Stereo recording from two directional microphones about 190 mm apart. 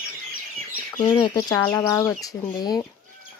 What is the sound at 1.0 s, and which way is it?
Speech, 25° left (ahead or behind).